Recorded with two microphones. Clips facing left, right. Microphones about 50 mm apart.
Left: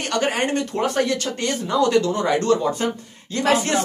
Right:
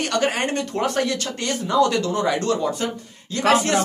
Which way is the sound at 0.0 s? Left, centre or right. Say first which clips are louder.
Even; centre.